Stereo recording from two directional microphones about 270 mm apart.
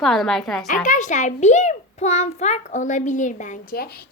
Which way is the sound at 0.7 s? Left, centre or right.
Left.